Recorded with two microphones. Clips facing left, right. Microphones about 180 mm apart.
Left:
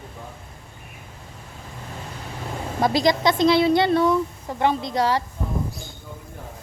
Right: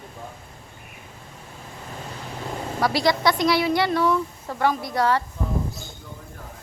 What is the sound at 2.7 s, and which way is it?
Speech, 20° left (ahead or behind).